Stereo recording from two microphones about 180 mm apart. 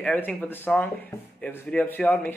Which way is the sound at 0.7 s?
5° left (ahead or behind).